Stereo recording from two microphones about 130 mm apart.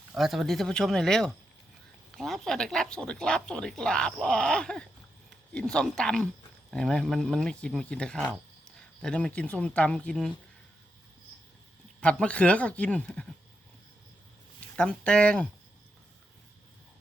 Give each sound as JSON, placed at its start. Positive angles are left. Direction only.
{"t": 0.1, "sound": "speech", "side_deg": 0}
{"t": 11.9, "sound": "speech", "side_deg": 10}
{"t": 14.8, "sound": "speech", "side_deg": 5}